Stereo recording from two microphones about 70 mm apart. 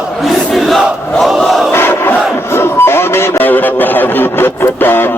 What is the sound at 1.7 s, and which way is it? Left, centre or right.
Crowd, left.